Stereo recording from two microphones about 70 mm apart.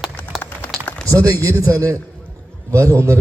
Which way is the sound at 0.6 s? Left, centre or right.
Left.